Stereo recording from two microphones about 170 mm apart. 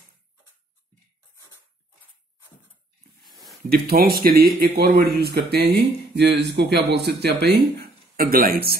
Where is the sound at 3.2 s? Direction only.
Centre (ahead or behind).